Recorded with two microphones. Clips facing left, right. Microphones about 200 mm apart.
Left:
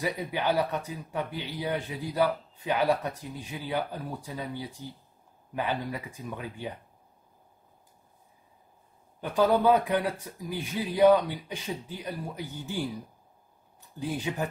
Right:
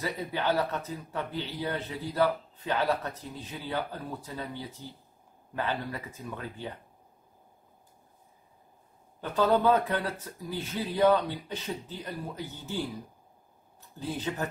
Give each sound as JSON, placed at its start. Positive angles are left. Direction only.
{"t": 0.0, "sound": "speech", "side_deg": 15}
{"t": 9.2, "sound": "speech", "side_deg": 10}
{"t": 13.9, "sound": "speech", "side_deg": 15}